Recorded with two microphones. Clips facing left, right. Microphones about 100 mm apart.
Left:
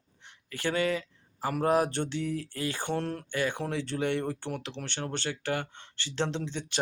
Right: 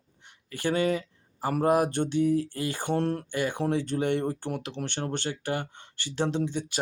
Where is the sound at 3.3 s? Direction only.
15° right (ahead or behind).